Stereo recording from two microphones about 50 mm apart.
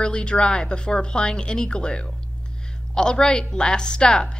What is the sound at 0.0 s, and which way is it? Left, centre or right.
A woman's voice, centre.